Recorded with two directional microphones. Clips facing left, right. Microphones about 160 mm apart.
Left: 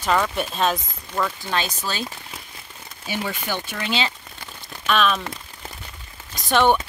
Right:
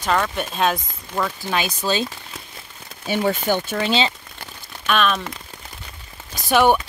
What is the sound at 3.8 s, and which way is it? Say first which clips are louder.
Speech: right 3 dB; 30° right (ahead or behind).